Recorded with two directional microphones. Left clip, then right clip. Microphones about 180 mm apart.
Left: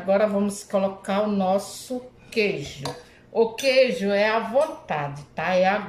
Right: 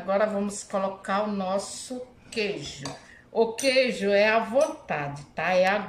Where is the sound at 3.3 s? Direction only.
5° left (ahead or behind).